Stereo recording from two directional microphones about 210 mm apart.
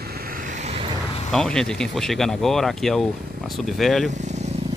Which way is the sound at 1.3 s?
Centre (ahead or behind).